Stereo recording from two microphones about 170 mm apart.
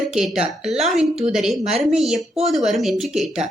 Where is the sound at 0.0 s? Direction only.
Centre (ahead or behind).